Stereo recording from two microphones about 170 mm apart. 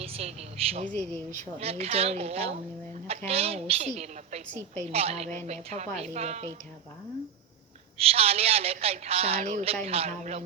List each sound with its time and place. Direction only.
0.0 s speech: 35° right (ahead or behind)
0.9 s speech: 10° left (ahead or behind)
1.3 s speech: 45° right (ahead or behind)
7.9 s speech: 35° right (ahead or behind)